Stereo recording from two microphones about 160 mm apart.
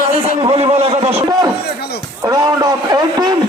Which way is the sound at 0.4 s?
40° right (ahead or behind).